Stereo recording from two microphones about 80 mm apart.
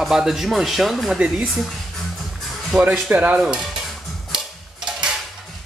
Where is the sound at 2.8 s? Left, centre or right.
Centre.